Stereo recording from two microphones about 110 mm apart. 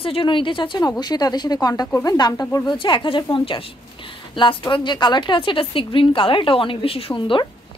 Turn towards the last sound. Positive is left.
turn(degrees=50)  # may be behind; listen again after turning